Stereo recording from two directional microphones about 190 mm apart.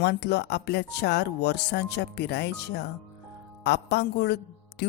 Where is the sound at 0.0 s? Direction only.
60° left (ahead or behind).